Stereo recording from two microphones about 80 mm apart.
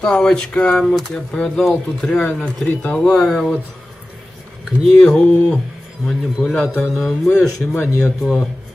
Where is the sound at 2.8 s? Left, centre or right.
Centre.